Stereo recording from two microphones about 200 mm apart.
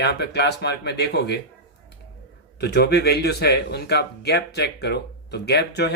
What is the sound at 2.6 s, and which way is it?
Speech, 55° left (ahead or behind).